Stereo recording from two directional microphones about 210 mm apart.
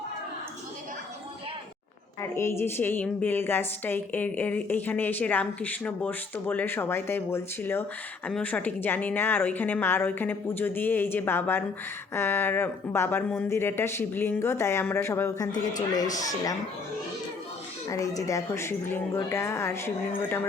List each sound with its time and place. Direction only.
2.2 s a woman's voice: 10° left (ahead or behind)
17.8 s a woman's voice: 15° left (ahead or behind)